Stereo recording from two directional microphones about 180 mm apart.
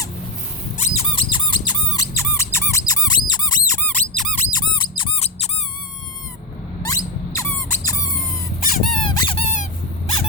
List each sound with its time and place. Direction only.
0.8 s squeak: 35° left (ahead or behind); by 4.4 s 5° left (ahead or behind)
4.5 s squeak: 25° left (ahead or behind)
6.8 s squeak: 15° left (ahead or behind)